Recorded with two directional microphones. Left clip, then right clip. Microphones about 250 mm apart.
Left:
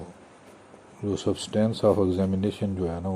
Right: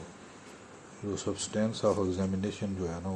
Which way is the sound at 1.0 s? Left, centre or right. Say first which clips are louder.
Left 7 dB; left.